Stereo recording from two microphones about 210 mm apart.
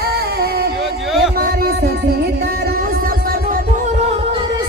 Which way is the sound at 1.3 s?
45° right (ahead or behind).